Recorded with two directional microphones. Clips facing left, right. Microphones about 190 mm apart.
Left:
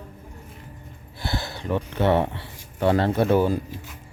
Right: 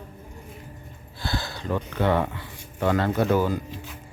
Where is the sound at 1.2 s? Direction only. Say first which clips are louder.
Left 1 dB; 25° left (ahead or behind).